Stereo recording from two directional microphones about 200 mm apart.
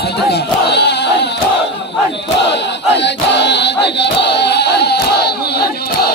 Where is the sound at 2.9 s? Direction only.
60° left (ahead or behind).